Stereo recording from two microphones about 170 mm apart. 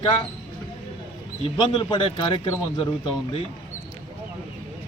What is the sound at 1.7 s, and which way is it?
Speech, 30° left (ahead or behind).